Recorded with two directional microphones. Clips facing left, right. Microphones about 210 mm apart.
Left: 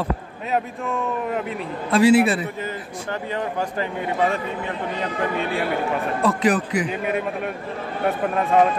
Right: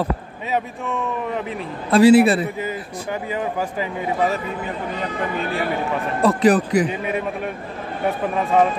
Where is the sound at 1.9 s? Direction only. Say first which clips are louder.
Right 4 dB; 35° right (ahead or behind).